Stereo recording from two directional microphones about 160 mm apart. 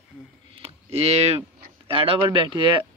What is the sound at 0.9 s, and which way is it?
Speech, 40° right (ahead or behind).